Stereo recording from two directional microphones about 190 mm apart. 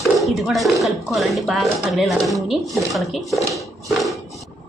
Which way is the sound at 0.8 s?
Centre (ahead or behind).